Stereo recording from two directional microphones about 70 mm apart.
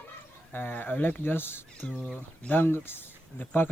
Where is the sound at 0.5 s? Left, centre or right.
Left.